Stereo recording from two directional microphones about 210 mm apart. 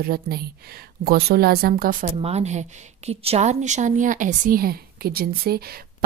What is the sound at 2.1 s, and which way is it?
A woman's voice, 30° right (ahead or behind).